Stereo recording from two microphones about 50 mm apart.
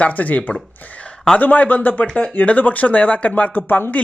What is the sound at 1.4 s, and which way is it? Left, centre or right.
Speech, left.